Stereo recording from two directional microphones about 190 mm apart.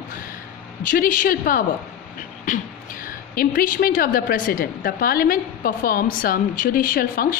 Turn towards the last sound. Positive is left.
turn(degrees=50)  # may be behind; listen again after turning